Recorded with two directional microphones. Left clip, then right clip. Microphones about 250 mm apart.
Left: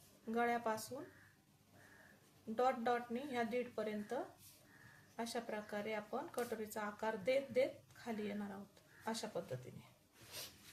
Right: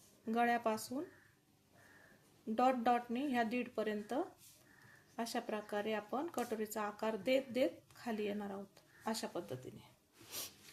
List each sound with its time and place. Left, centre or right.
0.3 s speech: right
2.6 s speech: right